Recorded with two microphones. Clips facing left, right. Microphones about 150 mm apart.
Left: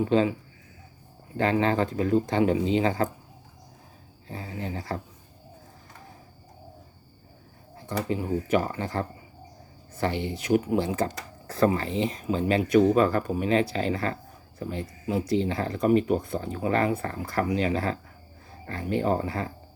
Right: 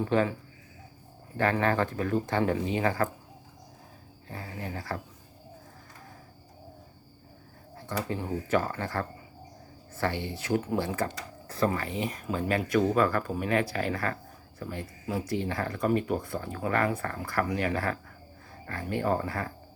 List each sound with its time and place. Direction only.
0.0 s speech: 20° left (ahead or behind)
1.4 s speech: 20° left (ahead or behind)
4.3 s speech: 25° left (ahead or behind)
7.9 s speech: 15° left (ahead or behind)